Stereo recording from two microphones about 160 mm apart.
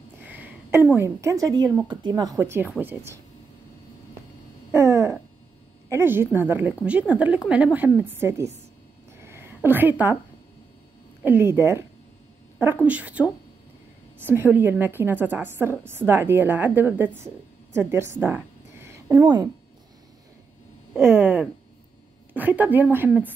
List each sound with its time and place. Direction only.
0.2 s a woman's voice: 10° right (ahead or behind)
4.7 s a sound: 20° right (ahead or behind)
5.9 s a woman's voice: 15° right (ahead or behind)
9.2 s a sound: 15° right (ahead or behind)
11.2 s a woman's voice: 15° right (ahead or behind)
12.8 s a woman's voice: 10° right (ahead or behind); by 19.5 s 25° right (ahead or behind)
20.9 s a woman's voice: 15° right (ahead or behind)